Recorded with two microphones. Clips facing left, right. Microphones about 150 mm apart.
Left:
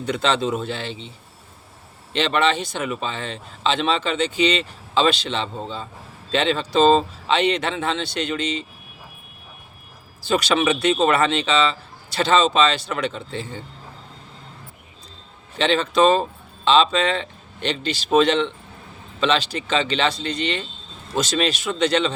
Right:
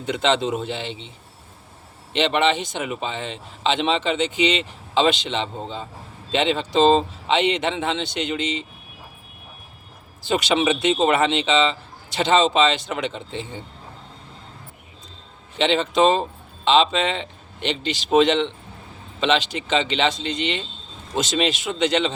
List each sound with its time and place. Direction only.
0.0 s speech: 20° right (ahead or behind)
2.1 s speech: 20° right (ahead or behind)
10.2 s speech: 20° right (ahead or behind)
15.5 s speech: 20° right (ahead or behind)